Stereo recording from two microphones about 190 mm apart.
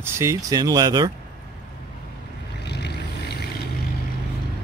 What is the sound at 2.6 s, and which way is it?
Vehicle, 60° left (ahead or behind).